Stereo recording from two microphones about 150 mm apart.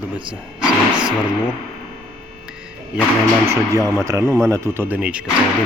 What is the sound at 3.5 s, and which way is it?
Speech, 20° right (ahead or behind).